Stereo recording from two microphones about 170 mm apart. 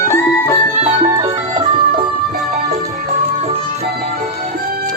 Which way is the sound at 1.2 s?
25° right (ahead or behind).